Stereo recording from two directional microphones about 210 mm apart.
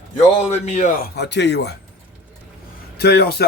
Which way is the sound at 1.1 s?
55° left (ahead or behind).